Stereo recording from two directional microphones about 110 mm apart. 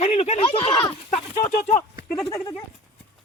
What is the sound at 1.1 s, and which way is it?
Speech, 80° left.